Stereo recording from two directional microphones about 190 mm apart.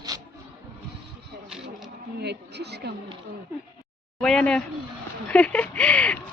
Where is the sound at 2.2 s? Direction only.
60° right (ahead or behind).